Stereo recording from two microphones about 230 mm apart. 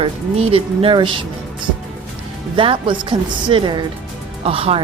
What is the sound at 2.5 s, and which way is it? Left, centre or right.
A woman's voice, right.